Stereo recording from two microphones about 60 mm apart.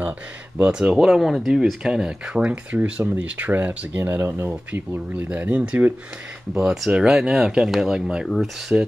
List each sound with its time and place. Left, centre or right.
0.7 s speech: centre; by 4.8 s right
5.4 s speech: right
6.5 s speech: centre